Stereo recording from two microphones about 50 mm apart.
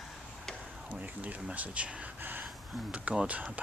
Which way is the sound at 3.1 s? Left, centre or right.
Right.